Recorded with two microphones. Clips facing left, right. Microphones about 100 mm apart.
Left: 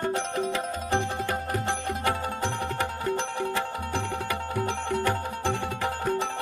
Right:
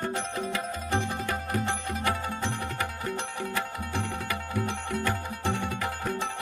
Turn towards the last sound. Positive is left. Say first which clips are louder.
# left 2 dB
turn(degrees=35)  # may be behind; listen again after turning